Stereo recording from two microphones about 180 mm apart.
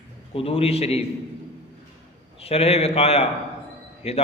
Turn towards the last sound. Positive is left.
turn(degrees=35)  # may be behind; listen again after turning